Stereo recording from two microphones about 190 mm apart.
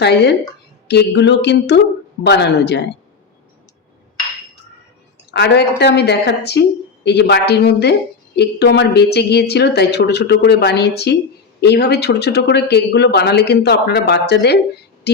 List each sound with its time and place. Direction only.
0.0 s speech: 60° left (ahead or behind)
5.3 s speech: 60° left (ahead or behind)